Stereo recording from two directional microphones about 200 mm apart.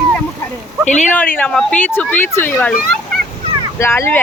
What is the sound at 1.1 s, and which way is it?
Speech, 10° left (ahead or behind).